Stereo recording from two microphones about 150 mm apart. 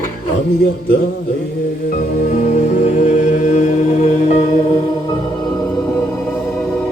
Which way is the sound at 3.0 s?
55° left (ahead or behind).